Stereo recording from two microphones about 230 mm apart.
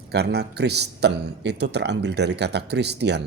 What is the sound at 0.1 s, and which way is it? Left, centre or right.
Speech, right.